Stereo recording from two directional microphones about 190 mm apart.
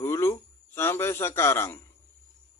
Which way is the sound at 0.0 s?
15° left (ahead or behind).